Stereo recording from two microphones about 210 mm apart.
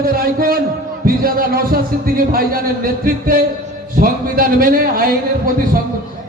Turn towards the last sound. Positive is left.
turn(degrees=-45)  # may be behind; listen again after turning